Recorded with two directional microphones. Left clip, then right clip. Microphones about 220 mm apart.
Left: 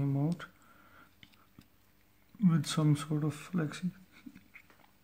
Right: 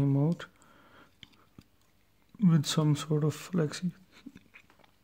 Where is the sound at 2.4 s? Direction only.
35° right (ahead or behind).